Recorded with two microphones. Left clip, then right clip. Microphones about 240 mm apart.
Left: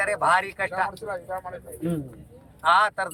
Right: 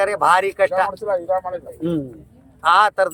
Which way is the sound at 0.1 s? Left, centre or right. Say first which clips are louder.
Right 6 dB; right.